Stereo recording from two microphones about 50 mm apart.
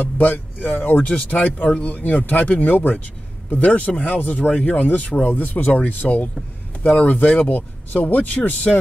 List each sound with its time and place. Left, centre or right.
0.0 s speech: left
0.7 s speech: left
1.0 s speech: left